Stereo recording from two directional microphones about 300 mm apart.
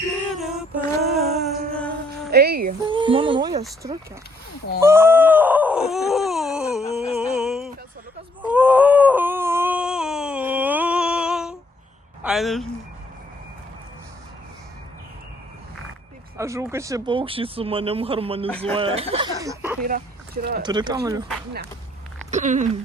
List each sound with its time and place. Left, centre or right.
0.3 s female singing: centre
0.9 s a sound: centre
1.7 s music: centre
2.3 s music: right
2.9 s a sound: centre
4.8 s groan: centre
7.1 s a sound: centre
12.2 s speech: centre
16.4 s speech: centre
18.4 s speech: centre
18.7 s speech: centre
19.8 s speech: right
20.6 s speech: centre
22.3 s speech: right